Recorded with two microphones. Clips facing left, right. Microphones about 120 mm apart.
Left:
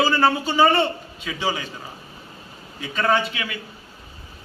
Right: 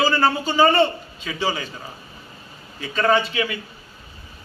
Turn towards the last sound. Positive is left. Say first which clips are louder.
# right 2 dB
turn(degrees=5)  # may be behind; listen again after turning